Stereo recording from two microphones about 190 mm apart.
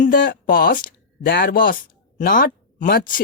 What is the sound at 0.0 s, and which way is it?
Speech, 45° left (ahead or behind).